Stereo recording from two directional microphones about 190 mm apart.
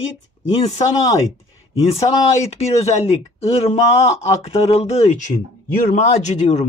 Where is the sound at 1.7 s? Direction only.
30° left (ahead or behind).